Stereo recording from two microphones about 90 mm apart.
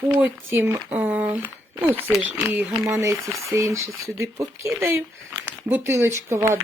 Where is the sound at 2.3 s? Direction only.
20° right (ahead or behind).